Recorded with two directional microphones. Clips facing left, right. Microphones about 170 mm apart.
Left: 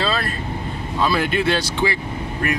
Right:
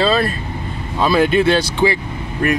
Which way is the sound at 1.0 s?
20° right (ahead or behind).